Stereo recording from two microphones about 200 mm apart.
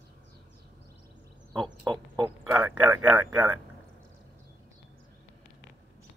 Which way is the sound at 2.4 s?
5° right (ahead or behind).